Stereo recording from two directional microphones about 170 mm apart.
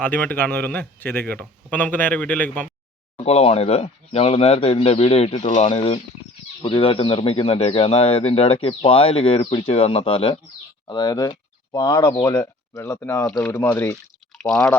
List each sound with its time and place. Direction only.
0.0 s a man's voice: 10° left (ahead or behind)
3.2 s a man's voice: 35° left (ahead or behind); by 14.8 s 5° left (ahead or behind)